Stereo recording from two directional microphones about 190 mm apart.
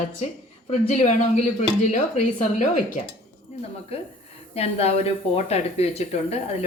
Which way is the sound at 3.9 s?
30° left (ahead or behind).